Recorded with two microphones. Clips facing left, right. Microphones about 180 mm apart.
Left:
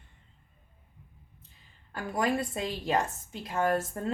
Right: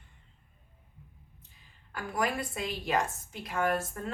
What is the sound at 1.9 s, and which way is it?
A woman's voice, 25° left (ahead or behind).